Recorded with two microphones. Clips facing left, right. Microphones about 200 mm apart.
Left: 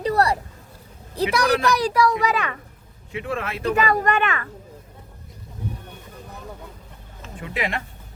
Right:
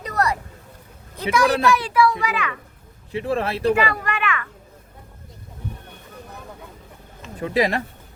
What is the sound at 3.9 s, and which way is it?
Speech, 35° left (ahead or behind).